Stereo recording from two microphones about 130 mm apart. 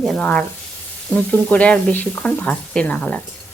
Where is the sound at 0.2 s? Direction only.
10° left (ahead or behind).